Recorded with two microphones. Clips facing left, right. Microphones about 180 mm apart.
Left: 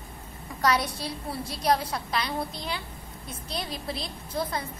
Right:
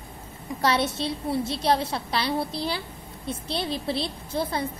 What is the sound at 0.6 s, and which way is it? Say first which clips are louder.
A woman's voice: right 2 dB; 25° right (ahead or behind).